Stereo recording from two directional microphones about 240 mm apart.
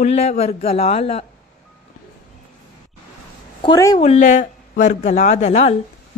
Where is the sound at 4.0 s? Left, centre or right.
Left.